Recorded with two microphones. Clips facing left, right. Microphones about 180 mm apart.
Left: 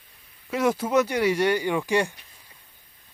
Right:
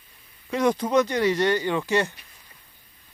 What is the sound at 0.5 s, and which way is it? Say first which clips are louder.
Speech: right 1 dB; 5° left (ahead or behind).